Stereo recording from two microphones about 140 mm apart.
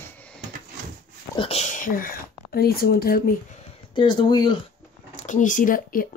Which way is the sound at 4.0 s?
30° left (ahead or behind).